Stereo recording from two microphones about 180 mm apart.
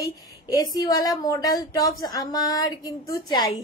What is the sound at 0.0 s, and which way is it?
Speech, 20° left (ahead or behind).